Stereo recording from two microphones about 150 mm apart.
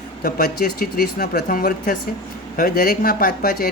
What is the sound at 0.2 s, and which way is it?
Speech, 80° left.